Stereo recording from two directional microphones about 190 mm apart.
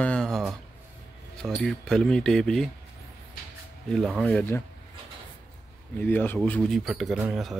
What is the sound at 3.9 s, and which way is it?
Speech, centre (ahead or behind).